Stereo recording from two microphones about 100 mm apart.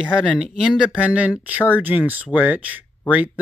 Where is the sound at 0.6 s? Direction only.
10° right (ahead or behind).